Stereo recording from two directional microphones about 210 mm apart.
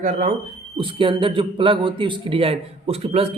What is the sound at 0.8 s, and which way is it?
A man's voice, 25° right (ahead or behind).